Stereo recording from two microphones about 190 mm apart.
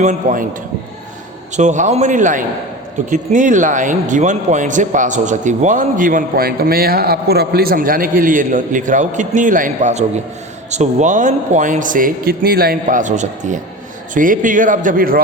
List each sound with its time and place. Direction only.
0.0 s a man's voice: 40° right (ahead or behind)
1.5 s a man's voice: 40° right (ahead or behind)